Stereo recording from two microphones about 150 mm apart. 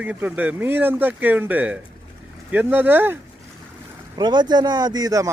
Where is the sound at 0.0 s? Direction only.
10° right (ahead or behind).